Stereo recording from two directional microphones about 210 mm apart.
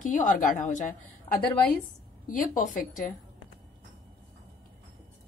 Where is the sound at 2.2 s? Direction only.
40° left (ahead or behind).